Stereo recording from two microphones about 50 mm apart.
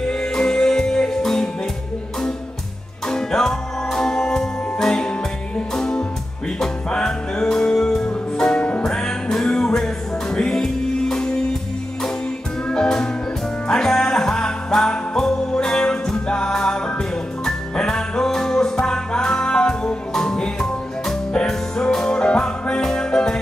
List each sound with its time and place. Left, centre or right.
0.0 s music: centre
3.1 s music: centre
12.6 s music: centre